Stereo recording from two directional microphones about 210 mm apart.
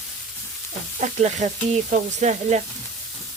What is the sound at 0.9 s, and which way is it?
Frying, 35° right (ahead or behind).